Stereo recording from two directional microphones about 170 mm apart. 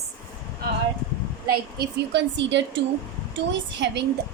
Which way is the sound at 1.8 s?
90° right.